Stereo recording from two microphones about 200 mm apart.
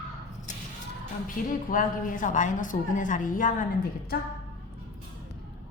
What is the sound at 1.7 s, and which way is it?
A woman's voice, 45° left (ahead or behind).